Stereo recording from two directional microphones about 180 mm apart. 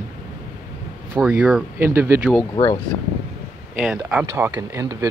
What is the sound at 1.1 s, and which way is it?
Speech, 5° right (ahead or behind).